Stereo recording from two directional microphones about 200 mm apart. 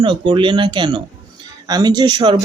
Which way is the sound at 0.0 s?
25° right (ahead or behind).